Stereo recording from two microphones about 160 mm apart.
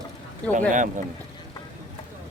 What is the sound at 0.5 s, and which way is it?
Speech, 55° right (ahead or behind).